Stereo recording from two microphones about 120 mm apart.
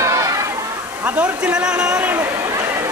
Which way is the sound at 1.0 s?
10° right (ahead or behind).